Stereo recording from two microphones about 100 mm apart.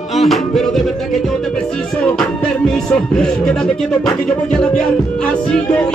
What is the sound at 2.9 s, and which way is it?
Music, 5° left (ahead or behind).